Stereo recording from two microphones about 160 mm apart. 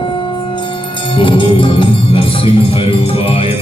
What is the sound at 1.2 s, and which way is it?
Music, 30° left (ahead or behind).